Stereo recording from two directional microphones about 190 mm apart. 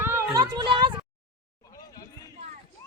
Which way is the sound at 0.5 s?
25° right (ahead or behind).